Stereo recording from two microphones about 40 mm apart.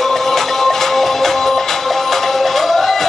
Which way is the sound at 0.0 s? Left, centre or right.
Centre.